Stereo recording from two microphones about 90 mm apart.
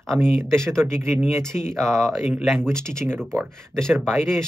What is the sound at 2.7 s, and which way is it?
Speech, 10° left (ahead or behind).